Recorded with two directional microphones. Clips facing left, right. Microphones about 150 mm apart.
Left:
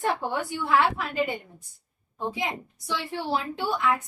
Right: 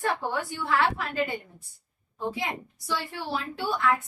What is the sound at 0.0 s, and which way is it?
Speech, 20° left (ahead or behind).